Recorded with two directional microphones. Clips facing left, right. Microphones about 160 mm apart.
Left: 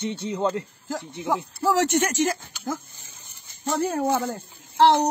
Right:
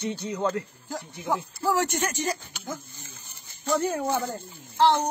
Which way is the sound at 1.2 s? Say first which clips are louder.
Left 3 dB; 90° left.